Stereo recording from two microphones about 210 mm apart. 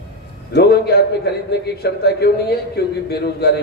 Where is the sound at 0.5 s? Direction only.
50° left (ahead or behind).